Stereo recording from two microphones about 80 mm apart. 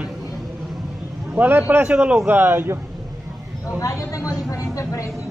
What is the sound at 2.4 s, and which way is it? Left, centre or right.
Speech, right.